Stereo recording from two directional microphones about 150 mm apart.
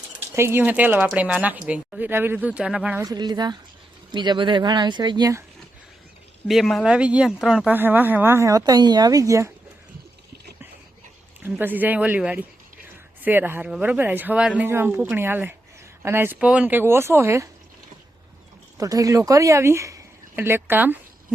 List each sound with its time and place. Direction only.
0.3 s speech: 15° right (ahead or behind)
3.0 s speech: 25° right (ahead or behind)
6.5 s speech: centre (ahead or behind); by 9.5 s 20° right (ahead or behind)
11.4 s speech: 10° right (ahead or behind)
18.8 s speech: 20° right (ahead or behind)